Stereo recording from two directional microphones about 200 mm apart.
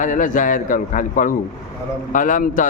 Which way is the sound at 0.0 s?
40° left (ahead or behind).